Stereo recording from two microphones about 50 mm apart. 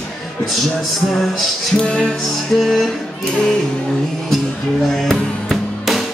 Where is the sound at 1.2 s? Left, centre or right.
Centre.